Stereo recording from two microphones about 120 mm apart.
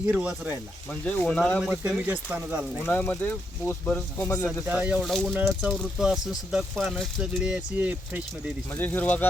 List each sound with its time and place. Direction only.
0.1 s speech: 10° right (ahead or behind)
0.9 s speech: 10° left (ahead or behind)
1.7 s speech: 10° right (ahead or behind)
2.8 s speech: 15° left (ahead or behind)
4.6 s speech: 15° right (ahead or behind)
5.0 s speech: centre (ahead or behind)
5.3 s speech: 15° right (ahead or behind)
5.7 s speech: centre (ahead or behind)
8.7 s speech: 15° left (ahead or behind)